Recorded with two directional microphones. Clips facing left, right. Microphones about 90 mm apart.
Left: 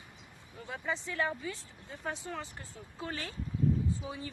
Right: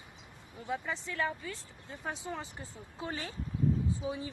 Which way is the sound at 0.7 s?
Centre (ahead or behind).